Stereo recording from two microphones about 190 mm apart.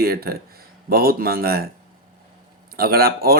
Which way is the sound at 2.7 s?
55° right (ahead or behind).